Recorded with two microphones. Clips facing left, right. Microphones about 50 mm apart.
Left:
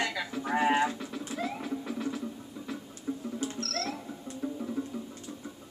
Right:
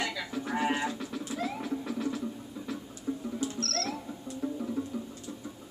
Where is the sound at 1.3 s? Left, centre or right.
Centre.